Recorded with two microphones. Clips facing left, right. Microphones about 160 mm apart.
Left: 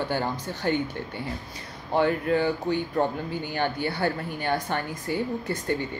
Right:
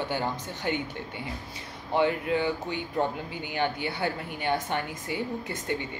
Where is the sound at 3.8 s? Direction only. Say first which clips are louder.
Left 4 dB; 15° right (ahead or behind).